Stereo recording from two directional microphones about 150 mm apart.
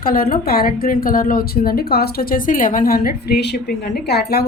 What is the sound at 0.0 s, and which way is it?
A woman's voice, 75° left (ahead or behind).